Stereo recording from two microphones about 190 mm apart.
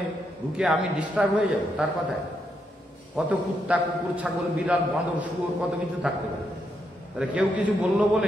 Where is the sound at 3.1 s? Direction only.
5° right (ahead or behind).